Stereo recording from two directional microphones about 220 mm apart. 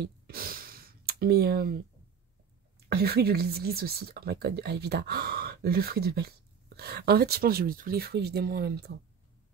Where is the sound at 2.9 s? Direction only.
45° right (ahead or behind).